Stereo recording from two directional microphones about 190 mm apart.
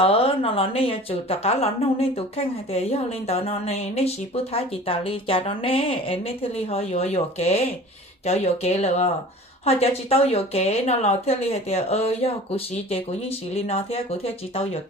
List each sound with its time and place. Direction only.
0.0 s speech: 30° left (ahead or behind)